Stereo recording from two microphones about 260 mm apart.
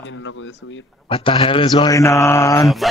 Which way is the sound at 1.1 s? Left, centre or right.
Centre.